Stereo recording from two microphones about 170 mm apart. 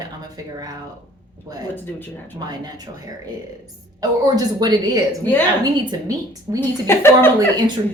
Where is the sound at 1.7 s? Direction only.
10° left (ahead or behind).